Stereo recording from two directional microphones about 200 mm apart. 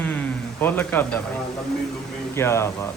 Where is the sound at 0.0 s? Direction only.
10° left (ahead or behind).